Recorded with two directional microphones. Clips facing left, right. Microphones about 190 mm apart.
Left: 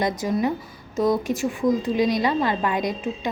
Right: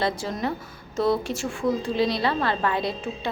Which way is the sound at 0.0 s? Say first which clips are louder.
Left 4 dB; 15° left (ahead or behind).